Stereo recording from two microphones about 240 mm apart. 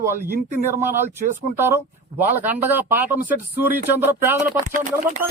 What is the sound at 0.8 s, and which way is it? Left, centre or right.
Speech, centre.